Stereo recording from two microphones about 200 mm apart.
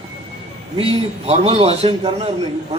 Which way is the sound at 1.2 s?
30° right (ahead or behind).